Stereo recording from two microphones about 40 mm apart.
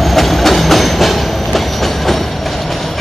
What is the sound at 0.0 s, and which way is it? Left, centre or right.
Train, centre.